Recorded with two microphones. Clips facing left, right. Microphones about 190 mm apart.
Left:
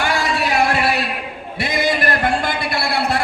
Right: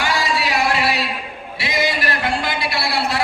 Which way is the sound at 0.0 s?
55° left (ahead or behind).